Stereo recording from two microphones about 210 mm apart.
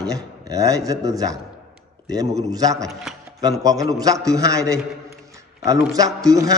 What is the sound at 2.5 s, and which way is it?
A man's voice, 15° right (ahead or behind).